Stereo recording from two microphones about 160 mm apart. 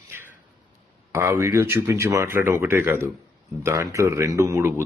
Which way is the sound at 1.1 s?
15° right (ahead or behind).